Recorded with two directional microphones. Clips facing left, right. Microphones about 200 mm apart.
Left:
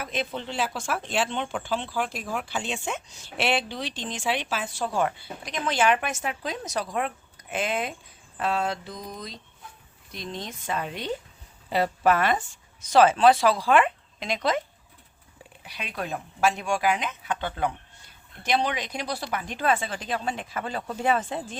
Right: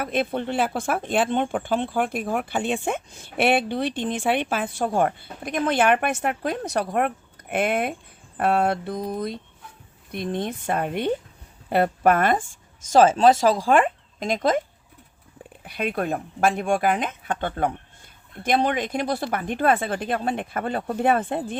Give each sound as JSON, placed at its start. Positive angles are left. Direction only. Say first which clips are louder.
{"t": 0.0, "sound": "speech", "louder": "right 6 dB", "side_deg": -55}
{"t": 15.6, "sound": "speech", "louder": "right 9 dB", "side_deg": -50}